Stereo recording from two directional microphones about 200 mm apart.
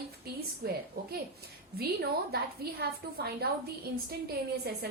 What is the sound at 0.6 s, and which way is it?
Speech, 50° right (ahead or behind).